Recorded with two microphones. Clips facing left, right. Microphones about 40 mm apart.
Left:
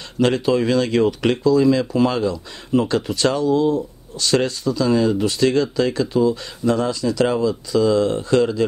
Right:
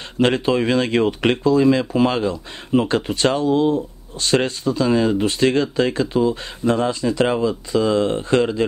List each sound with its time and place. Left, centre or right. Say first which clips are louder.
0.2 s speech: even; right